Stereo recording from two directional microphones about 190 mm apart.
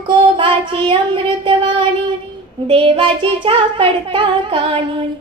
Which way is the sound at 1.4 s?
25° right (ahead or behind).